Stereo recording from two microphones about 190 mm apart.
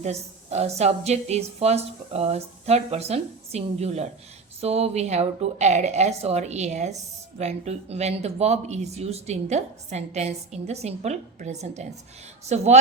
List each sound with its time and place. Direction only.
0.0 s a woman's voice: 35° right (ahead or behind)